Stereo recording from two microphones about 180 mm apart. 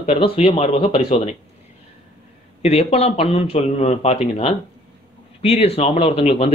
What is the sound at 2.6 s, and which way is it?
Speech, 35° left (ahead or behind).